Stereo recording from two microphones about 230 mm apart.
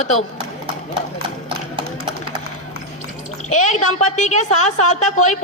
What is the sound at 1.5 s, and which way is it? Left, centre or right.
Clip-clop, right.